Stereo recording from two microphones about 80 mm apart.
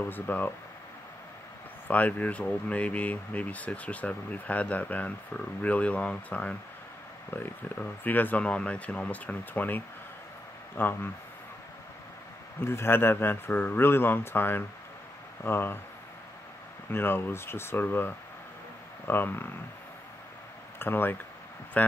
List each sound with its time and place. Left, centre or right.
0.0 s speech: left
1.9 s speech: centre
12.5 s speech: left
16.9 s speech: left
20.8 s speech: left